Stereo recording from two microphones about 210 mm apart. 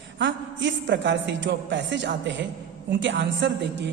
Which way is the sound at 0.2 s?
60° right (ahead or behind).